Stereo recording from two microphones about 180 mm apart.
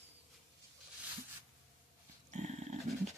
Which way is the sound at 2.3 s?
40° right (ahead or behind).